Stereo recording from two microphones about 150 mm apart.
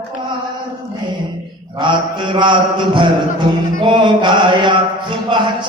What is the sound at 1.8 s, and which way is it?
Mantra, 30° right (ahead or behind).